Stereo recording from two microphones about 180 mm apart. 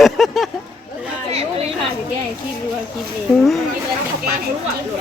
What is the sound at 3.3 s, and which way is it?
Speech, centre (ahead or behind).